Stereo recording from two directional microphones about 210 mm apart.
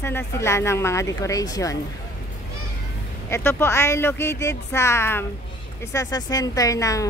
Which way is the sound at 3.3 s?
10° left (ahead or behind).